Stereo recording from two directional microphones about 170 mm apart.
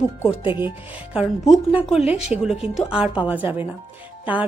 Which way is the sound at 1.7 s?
5° right (ahead or behind).